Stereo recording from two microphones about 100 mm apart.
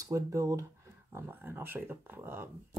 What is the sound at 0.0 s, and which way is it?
Speech, 35° right (ahead or behind).